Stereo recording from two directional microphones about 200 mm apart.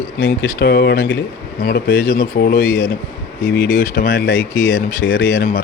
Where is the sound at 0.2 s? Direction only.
55° left (ahead or behind).